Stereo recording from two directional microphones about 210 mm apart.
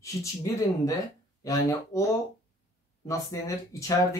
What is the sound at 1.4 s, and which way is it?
Speech, 15° left (ahead or behind).